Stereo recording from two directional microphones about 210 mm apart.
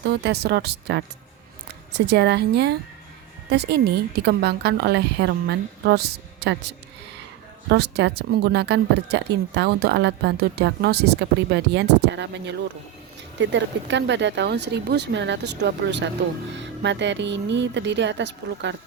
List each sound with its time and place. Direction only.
0.0 s speech: 50° right (ahead or behind)